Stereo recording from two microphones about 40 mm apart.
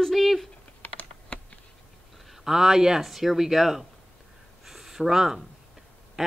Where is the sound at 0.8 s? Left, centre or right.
Left.